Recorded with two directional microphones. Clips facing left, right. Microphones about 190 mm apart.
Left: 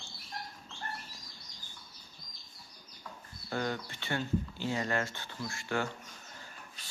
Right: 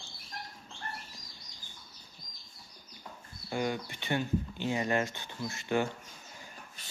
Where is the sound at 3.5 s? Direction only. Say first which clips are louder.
Right 2 dB; 15° right (ahead or behind).